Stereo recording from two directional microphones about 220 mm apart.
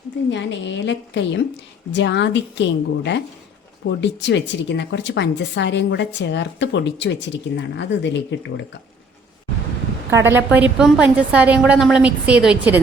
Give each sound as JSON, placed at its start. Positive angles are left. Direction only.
{"t": 0.3, "sound": "a woman's voice", "side_deg": 55}
{"t": 10.1, "sound": "a woman's voice", "side_deg": -10}